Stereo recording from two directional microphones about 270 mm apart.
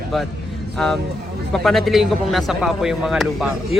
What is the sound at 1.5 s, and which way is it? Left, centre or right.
Speech, centre.